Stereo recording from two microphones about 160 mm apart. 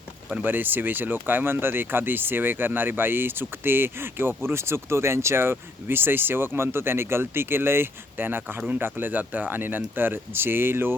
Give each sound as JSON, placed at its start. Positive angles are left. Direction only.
{"t": 0.3, "sound": "speech", "side_deg": -10}